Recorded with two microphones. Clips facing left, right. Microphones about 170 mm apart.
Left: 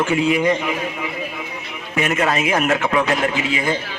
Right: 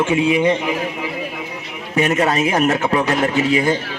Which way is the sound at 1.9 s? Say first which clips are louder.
Right 3 dB; 35° right (ahead or behind).